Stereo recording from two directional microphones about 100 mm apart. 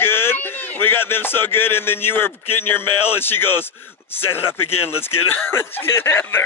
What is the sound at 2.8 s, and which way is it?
Speech, 20° left (ahead or behind).